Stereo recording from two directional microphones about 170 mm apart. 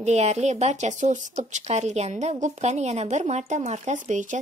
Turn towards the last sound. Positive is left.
turn(degrees=-45)  # may be behind; listen again after turning